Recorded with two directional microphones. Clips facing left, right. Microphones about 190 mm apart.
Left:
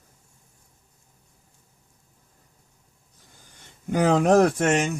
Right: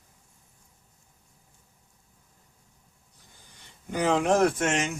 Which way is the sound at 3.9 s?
45° left (ahead or behind).